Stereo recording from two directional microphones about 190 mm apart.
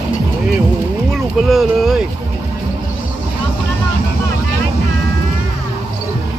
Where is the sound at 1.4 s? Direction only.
Centre (ahead or behind).